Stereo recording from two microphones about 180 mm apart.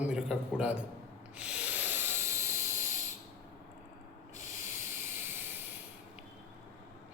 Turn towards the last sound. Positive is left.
turn(degrees=-10)  # may be behind; listen again after turning